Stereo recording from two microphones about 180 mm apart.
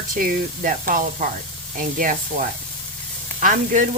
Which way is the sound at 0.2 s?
50° right (ahead or behind).